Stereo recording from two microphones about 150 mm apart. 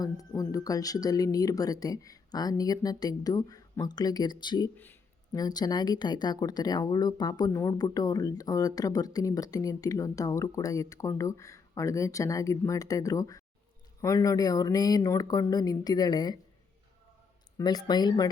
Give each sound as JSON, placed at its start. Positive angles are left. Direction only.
{"t": 0.0, "sound": "speech", "side_deg": 25}
{"t": 4.8, "sound": "a sound", "side_deg": 15}
{"t": 5.4, "sound": "speech", "side_deg": 25}
{"t": 17.6, "sound": "speech", "side_deg": 25}